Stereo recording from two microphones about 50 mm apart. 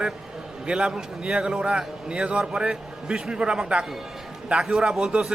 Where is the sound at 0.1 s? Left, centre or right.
Centre.